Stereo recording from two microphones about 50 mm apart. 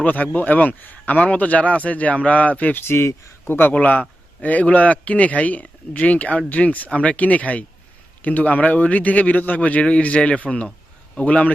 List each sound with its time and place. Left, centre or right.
0.0 s speech: left
2.7 s speech: left
3.4 s a man's voice: left